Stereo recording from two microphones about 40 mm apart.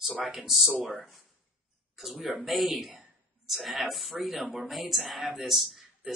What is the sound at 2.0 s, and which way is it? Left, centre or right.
Speech, centre.